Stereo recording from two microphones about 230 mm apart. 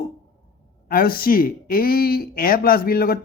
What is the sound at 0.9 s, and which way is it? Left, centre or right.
Speech, left.